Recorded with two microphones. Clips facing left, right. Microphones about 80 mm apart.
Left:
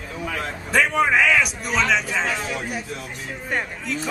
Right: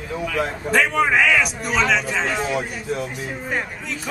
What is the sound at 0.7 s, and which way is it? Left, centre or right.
A man's voice, centre.